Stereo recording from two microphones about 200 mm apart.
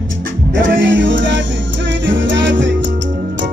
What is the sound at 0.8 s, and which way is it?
Music, 70° right (ahead or behind).